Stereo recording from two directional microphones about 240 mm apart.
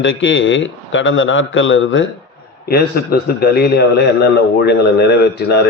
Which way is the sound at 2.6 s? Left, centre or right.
Left.